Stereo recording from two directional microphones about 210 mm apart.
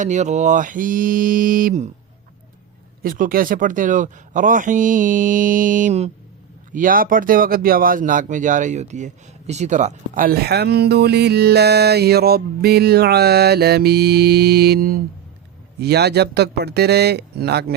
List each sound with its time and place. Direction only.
0.0 s speech: 35° right (ahead or behind)
3.0 s speech: 40° right (ahead or behind)